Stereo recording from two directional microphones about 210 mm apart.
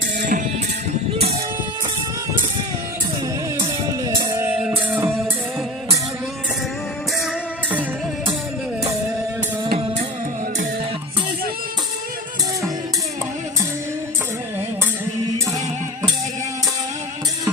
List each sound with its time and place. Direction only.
0.2 s music: 40° right (ahead or behind)
3.6 s music: 20° right (ahead or behind)
9.7 s music: 25° right (ahead or behind)